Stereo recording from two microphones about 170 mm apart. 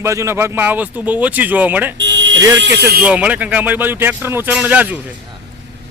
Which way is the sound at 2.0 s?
90° right.